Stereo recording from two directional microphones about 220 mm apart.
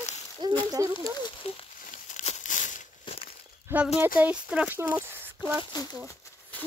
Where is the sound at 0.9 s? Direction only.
20° left (ahead or behind).